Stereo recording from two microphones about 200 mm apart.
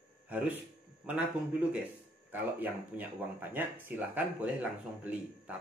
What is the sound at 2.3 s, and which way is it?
Speech, 10° right (ahead or behind).